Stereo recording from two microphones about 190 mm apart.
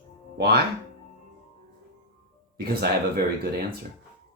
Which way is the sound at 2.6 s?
55° right (ahead or behind).